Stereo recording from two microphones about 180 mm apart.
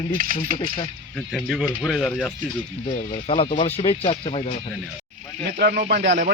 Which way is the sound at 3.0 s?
35° left (ahead or behind).